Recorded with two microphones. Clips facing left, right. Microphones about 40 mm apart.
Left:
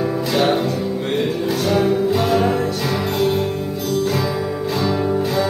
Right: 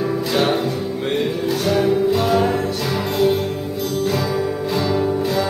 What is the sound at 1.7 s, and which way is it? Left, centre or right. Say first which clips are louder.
Music: right 1 dB; centre.